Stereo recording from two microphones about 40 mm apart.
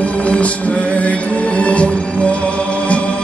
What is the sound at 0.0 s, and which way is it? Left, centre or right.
Music, left.